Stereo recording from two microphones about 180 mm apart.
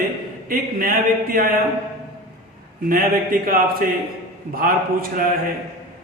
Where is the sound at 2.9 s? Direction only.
50° right (ahead or behind).